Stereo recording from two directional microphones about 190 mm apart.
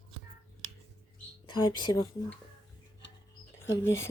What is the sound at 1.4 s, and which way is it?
Speech, 25° left (ahead or behind).